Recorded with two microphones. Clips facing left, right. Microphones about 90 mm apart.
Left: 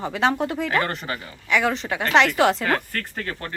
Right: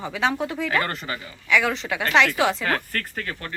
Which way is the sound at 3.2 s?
30° left (ahead or behind).